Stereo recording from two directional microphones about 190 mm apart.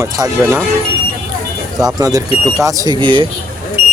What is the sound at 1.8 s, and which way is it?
Speech, 20° right (ahead or behind).